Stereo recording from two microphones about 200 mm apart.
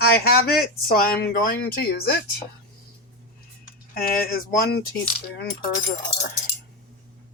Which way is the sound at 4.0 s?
50° left (ahead or behind).